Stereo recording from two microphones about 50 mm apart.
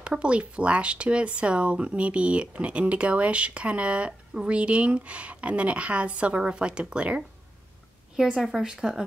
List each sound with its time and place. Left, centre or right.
0.0 s speech: right
8.2 s speech: centre